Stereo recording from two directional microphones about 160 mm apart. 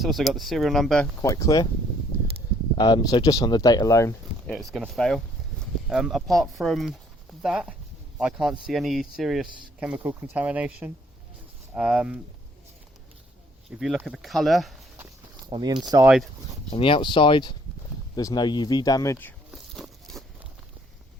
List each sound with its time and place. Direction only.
0.0 s speech: centre (ahead or behind)
1.2 s speech: 20° left (ahead or behind)
2.7 s speech: 25° left (ahead or behind)
4.4 s speech: centre (ahead or behind)
13.7 s speech: 5° right (ahead or behind)
15.4 s speech: 25° right (ahead or behind)
16.0 s speech: 5° right (ahead or behind)
16.6 s speech: 35° left (ahead or behind); by 19.3 s 15° left (ahead or behind)
19.5 s a sound: centre (ahead or behind)